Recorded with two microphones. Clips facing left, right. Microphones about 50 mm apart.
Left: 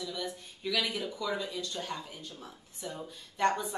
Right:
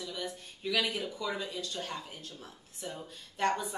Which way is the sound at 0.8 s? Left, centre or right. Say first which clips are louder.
Left 1 dB; centre.